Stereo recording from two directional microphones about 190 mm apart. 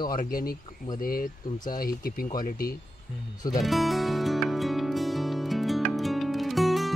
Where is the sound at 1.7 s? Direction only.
50° left (ahead or behind).